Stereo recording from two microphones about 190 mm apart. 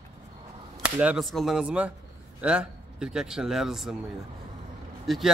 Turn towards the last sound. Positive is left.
turn(degrees=0)  # may be behind; listen again after turning